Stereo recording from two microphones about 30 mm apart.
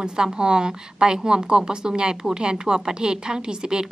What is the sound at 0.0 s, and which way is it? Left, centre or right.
A woman's voice, right.